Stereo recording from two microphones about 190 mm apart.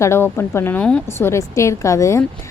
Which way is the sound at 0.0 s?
15° left (ahead or behind).